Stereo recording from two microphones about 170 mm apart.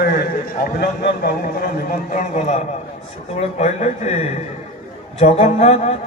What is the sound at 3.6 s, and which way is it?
A man's voice, 40° left (ahead or behind).